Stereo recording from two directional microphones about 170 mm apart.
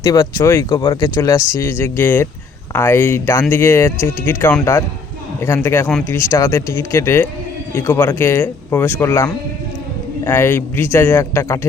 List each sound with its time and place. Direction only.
0.0 s speech: 20° left (ahead or behind)
5.6 s speech: 15° left (ahead or behind)